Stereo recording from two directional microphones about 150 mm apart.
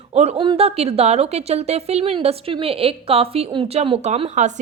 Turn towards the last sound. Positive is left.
turn(degrees=-45)  # may be behind; listen again after turning